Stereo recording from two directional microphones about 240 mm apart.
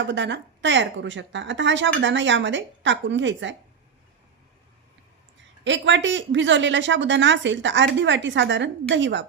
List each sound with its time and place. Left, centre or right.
0.1 s speech: right
5.6 s speech: right